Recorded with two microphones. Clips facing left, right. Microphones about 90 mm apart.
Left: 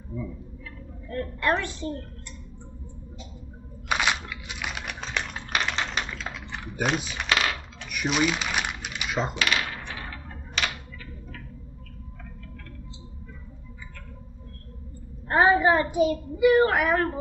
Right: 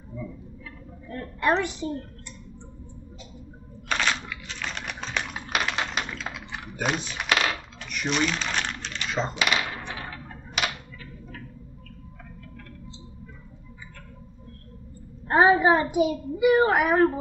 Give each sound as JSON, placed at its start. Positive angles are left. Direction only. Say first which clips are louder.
{"t": 1.1, "sound": "a woman's voice", "louder": "right 1 dB", "side_deg": -20}
{"t": 3.9, "sound": "a sound", "louder": "left 1 dB", "side_deg": 10}
{"t": 6.4, "sound": "typing", "louder": "left 1 dB", "side_deg": -5}
{"t": 7.0, "sound": "speech", "louder": "even", "side_deg": 5}
{"t": 7.2, "sound": "coin", "louder": "right 1 dB", "side_deg": -5}
{"t": 9.3, "sound": "coin", "louder": "right 1 dB", "side_deg": -20}
{"t": 15.2, "sound": "a woman's voice", "louder": "right 1 dB", "side_deg": -20}